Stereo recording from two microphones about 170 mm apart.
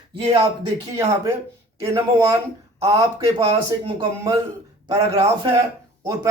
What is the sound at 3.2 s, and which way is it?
Speech, 30° right (ahead or behind).